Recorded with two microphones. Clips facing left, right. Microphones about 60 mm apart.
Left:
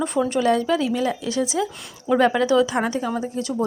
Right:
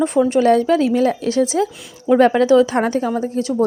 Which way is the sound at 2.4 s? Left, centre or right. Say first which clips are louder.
Right 5 dB; right.